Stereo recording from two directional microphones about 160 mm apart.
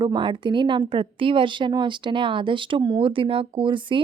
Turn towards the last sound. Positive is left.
turn(degrees=-30)  # may be behind; listen again after turning